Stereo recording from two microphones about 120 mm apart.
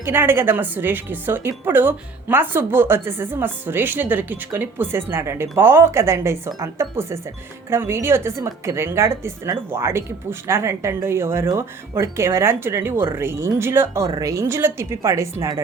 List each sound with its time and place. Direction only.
0.0 s a woman's voice: 20° right (ahead or behind)